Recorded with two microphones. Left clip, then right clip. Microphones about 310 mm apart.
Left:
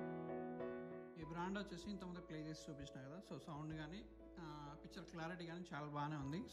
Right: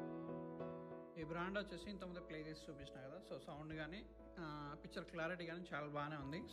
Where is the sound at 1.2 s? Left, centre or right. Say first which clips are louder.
Right 3 dB; centre.